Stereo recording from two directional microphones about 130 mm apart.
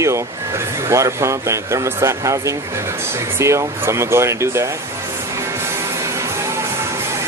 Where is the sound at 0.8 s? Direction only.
25° right (ahead or behind).